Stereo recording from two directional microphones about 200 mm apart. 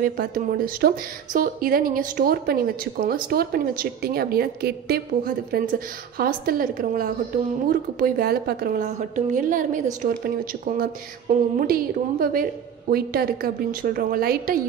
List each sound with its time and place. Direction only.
0.0 s speech: 45° right (ahead or behind)